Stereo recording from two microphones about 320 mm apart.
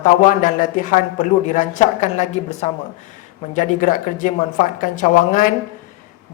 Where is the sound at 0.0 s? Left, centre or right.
Left.